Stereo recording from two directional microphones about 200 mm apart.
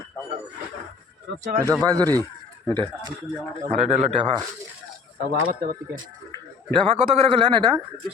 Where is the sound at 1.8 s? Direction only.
20° right (ahead or behind).